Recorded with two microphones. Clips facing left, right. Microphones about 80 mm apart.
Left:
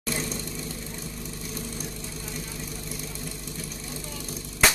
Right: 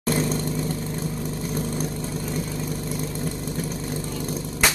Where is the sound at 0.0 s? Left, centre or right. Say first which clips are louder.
Right 8 dB; right.